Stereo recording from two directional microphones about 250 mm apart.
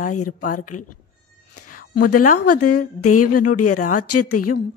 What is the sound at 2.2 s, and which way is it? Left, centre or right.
Speech, left.